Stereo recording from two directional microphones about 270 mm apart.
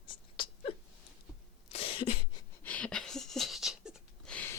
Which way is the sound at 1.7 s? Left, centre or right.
Left.